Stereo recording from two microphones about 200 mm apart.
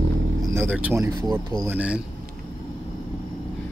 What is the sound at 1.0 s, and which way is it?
Speech, 20° right (ahead or behind).